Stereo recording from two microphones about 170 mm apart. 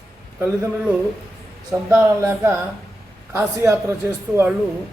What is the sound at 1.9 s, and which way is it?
A man's voice, 15° right (ahead or behind).